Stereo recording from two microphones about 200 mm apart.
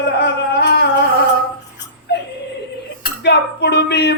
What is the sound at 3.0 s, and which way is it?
Speech, 55° left (ahead or behind).